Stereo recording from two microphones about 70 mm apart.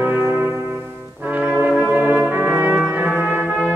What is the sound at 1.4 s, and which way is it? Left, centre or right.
Brass instrument, right.